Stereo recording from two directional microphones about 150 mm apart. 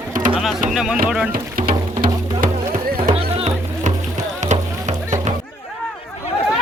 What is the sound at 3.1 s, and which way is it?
Music, 45° right (ahead or behind).